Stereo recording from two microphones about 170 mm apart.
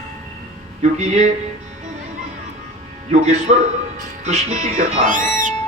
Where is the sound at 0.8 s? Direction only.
40° right (ahead or behind).